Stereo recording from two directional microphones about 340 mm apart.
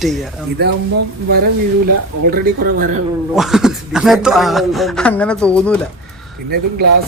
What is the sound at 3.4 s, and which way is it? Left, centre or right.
Speech, centre.